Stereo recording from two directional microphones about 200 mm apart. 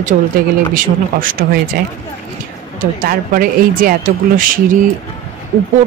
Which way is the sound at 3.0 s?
45° right (ahead or behind).